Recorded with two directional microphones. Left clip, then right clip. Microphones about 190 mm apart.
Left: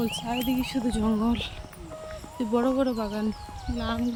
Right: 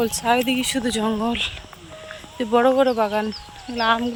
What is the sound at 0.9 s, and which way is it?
Speech, 5° left (ahead or behind).